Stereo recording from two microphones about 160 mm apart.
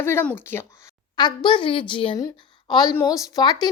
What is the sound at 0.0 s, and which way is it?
Speech, 15° left (ahead or behind).